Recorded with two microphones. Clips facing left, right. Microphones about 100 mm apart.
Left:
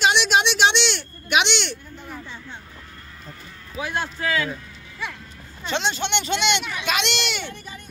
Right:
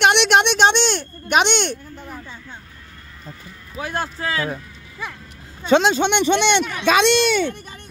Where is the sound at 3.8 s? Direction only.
40° right (ahead or behind).